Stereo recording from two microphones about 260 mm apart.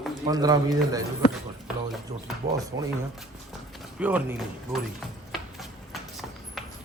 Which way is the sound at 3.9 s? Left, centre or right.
Centre.